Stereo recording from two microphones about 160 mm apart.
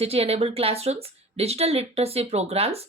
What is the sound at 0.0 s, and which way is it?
A woman's voice, 40° right (ahead or behind).